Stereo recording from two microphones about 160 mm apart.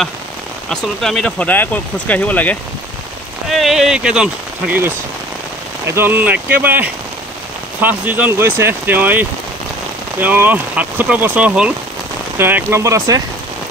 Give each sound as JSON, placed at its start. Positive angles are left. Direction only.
{"t": 0.7, "sound": "speech", "side_deg": 5}
{"t": 3.4, "sound": "speech", "side_deg": 0}